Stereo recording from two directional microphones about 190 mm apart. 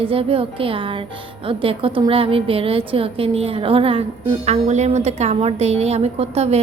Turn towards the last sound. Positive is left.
turn(degrees=-35)  # may be behind; listen again after turning